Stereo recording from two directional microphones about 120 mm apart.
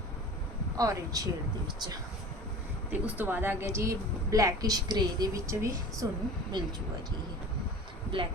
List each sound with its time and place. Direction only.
0.8 s speech: 30° right (ahead or behind)
2.9 s a woman's voice: 15° right (ahead or behind)
8.1 s speech: 50° right (ahead or behind)